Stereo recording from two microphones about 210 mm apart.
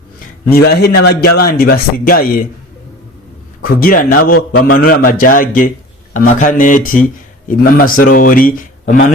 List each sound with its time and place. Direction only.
0.5 s a man's voice: 50° left (ahead or behind)
3.6 s a man's voice: 45° left (ahead or behind)